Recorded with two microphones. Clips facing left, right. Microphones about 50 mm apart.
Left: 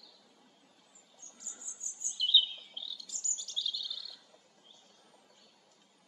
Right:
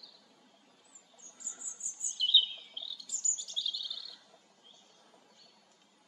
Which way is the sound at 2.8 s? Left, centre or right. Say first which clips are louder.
Even; centre.